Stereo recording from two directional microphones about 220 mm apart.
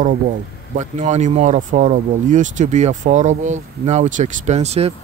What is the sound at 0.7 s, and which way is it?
Speech, 35° right (ahead or behind).